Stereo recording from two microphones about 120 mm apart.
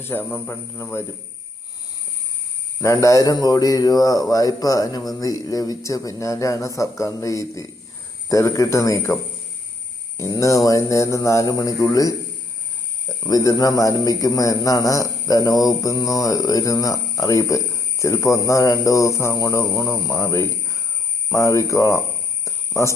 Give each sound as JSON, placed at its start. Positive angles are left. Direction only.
{"t": 0.0, "sound": "speech", "side_deg": 15}
{"t": 2.8, "sound": "speech", "side_deg": 25}
{"t": 10.3, "sound": "speech", "side_deg": 30}
{"t": 13.2, "sound": "speech", "side_deg": 30}
{"t": 22.4, "sound": "a sound", "side_deg": 25}